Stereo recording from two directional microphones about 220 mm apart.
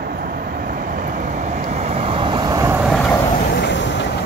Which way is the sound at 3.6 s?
55° left (ahead or behind).